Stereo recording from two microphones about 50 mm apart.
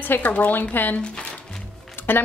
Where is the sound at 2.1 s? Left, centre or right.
Left.